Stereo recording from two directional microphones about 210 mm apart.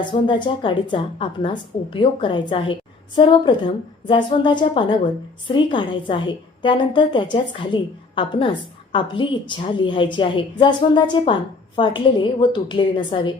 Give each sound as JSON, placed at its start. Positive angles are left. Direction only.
{"t": 0.0, "sound": "a woman's voice", "side_deg": 20}